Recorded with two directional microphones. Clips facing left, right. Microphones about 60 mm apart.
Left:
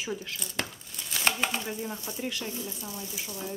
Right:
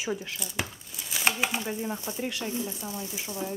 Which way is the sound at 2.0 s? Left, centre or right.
Right.